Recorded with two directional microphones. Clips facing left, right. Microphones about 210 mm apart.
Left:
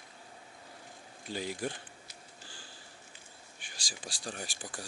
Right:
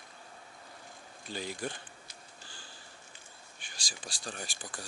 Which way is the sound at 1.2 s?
10° left (ahead or behind).